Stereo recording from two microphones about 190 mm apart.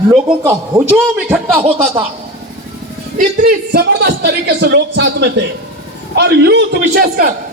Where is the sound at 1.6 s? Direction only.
30° right (ahead or behind).